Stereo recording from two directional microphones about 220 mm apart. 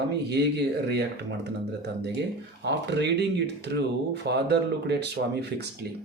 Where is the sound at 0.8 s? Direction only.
50° right (ahead or behind).